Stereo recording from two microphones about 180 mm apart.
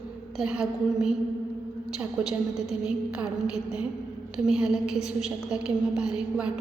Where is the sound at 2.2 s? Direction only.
5° right (ahead or behind).